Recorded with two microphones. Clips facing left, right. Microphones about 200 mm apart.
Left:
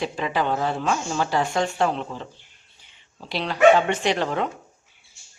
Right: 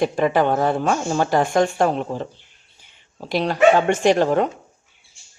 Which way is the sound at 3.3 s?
45° right (ahead or behind).